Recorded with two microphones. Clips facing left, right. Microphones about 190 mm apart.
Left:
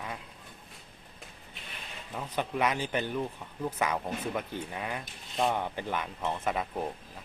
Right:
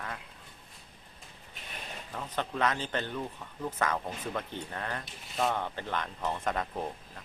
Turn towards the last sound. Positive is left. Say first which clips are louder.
# left 1 dB
turn(degrees=5)  # may be behind; listen again after turning